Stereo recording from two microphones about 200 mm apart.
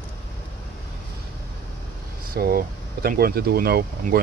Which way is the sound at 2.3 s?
50° right (ahead or behind).